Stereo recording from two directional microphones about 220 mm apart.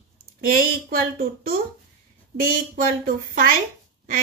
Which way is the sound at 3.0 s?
40° right (ahead or behind).